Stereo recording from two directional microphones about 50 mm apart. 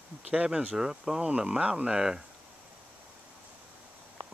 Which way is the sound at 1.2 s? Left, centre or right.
Right.